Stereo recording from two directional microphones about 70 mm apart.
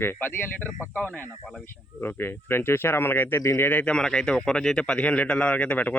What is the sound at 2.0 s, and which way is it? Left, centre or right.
Speech, left.